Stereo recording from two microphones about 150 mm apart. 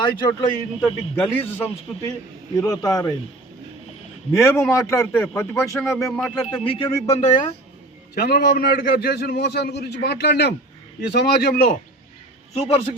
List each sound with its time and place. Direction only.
0.0 s a man's voice: 30° left (ahead or behind)
1.1 s a man's voice: 15° left (ahead or behind)
2.6 s a man's voice: 25° left (ahead or behind)
4.3 s a man's voice: 20° left (ahead or behind)
5.3 s speech: 5° left (ahead or behind)
6.5 s speech: 35° left (ahead or behind)
7.2 s speech: 55° left (ahead or behind)
8.1 s a man's voice: 90° left
12.5 s speech: 40° left (ahead or behind)